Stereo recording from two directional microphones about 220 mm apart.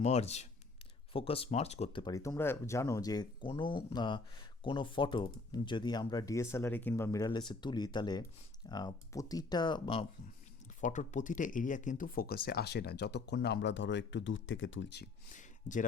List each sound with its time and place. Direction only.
0.0 s speech: 30° left (ahead or behind)
10.8 s speech: 35° left (ahead or behind); by 15.0 s 55° left (ahead or behind)
15.3 s a sound: 35° left (ahead or behind)